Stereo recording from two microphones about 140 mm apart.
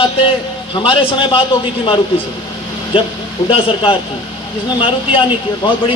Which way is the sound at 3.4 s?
40° left (ahead or behind).